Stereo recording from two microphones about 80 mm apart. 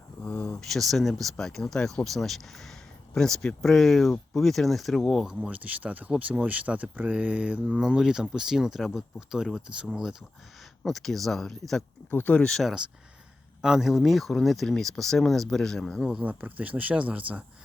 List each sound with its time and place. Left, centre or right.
0.3 s a sound: centre
0.7 s speech: centre
5.5 s speech: centre
12.1 s speech: left
12.5 s speech: centre
13.6 s speech: centre
16.1 s speech: centre